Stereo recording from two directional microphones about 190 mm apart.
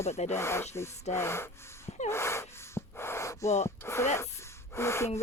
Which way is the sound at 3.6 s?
15° left (ahead or behind).